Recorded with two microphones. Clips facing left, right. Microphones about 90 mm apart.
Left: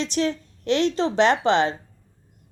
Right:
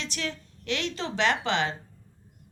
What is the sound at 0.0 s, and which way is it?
A woman's voice, 30° left (ahead or behind).